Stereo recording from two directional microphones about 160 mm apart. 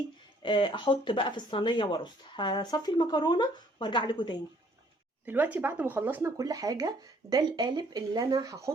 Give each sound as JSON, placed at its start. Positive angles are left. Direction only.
{"t": 0.4, "sound": "speech", "side_deg": 30}
{"t": 5.2, "sound": "speech", "side_deg": -10}